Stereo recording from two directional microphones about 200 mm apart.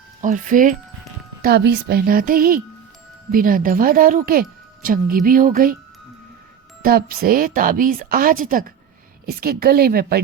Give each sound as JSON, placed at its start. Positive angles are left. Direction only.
{"t": 0.2, "sound": "a woman's voice", "side_deg": -40}
{"t": 6.8, "sound": "a woman's voice", "side_deg": -50}